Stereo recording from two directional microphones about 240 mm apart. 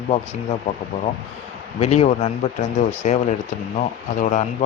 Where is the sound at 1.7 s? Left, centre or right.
Left.